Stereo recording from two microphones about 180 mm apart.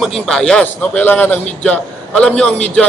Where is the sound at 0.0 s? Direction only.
5° left (ahead or behind).